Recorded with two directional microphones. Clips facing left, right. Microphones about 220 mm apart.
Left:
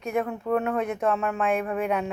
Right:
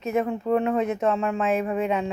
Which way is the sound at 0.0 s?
5° right (ahead or behind).